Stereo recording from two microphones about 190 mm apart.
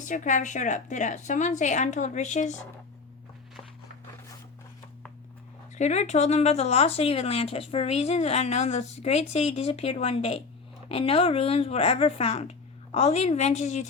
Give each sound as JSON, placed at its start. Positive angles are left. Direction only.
{"t": 0.0, "sound": "speech", "side_deg": 40}
{"t": 5.7, "sound": "speech", "side_deg": 40}